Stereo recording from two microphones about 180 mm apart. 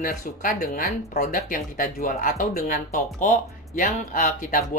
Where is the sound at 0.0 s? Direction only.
50° left (ahead or behind).